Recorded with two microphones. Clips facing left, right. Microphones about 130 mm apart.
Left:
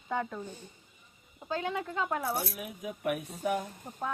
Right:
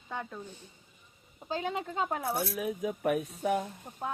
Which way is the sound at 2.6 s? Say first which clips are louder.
Right 7 dB; 35° right (ahead or behind).